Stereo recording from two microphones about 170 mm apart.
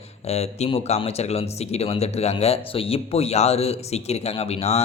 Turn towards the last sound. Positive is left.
turn(degrees=35)  # may be behind; listen again after turning